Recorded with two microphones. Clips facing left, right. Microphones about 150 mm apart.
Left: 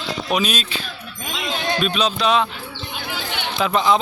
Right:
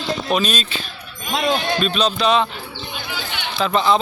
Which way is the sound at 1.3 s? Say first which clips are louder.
Right 8 dB; 55° right (ahead or behind).